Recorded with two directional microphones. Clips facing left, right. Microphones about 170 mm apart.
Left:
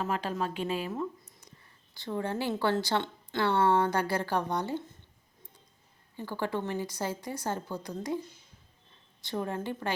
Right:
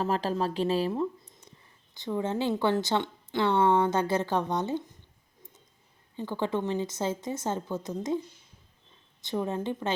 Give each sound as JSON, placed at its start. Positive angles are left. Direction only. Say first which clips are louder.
{"t": 0.0, "sound": "speech", "louder": "right 4 dB", "side_deg": -35}
{"t": 6.1, "sound": "a woman's voice", "louder": "right 3 dB", "side_deg": -20}
{"t": 9.2, "sound": "a woman's voice", "louder": "right 3 dB", "side_deg": -20}